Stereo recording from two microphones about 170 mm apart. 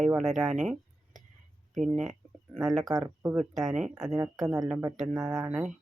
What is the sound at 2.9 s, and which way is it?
Speech, 20° right (ahead or behind).